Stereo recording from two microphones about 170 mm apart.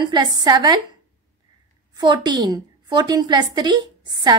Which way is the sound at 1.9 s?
25° right (ahead or behind).